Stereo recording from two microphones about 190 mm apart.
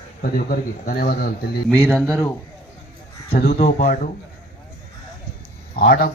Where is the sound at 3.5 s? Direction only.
40° left (ahead or behind).